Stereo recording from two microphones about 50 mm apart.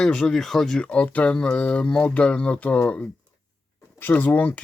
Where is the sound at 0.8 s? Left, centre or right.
Left.